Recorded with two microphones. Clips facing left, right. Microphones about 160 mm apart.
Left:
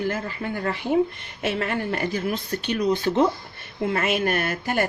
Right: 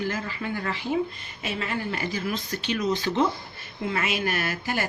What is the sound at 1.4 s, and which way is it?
A woman's voice, 55° left (ahead or behind).